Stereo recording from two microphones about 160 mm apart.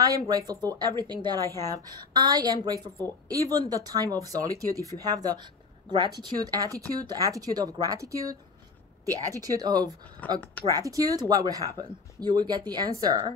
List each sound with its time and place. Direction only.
0.0 s speech: 25° right (ahead or behind)
10.2 s speech: 10° left (ahead or behind)
10.7 s speech: 20° right (ahead or behind)